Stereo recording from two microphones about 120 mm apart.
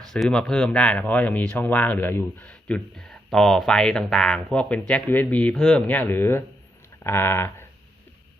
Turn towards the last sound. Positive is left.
turn(degrees=20)  # may be behind; listen again after turning